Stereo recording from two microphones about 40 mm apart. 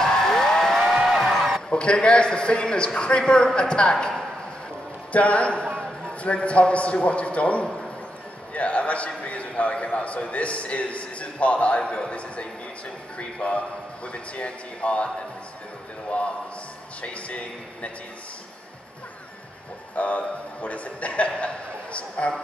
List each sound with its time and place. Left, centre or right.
0.0 s a sound: centre
1.0 s music: centre
1.3 s a sound: centre
1.7 s a man's voice: left
5.1 s a man's voice: left
20.0 s a man's voice: left